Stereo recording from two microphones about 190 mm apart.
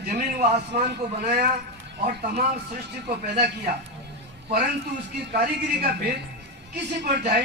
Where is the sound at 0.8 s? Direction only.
55° right (ahead or behind).